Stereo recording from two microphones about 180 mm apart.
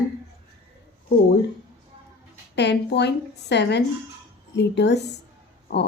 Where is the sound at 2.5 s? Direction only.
70° left (ahead or behind).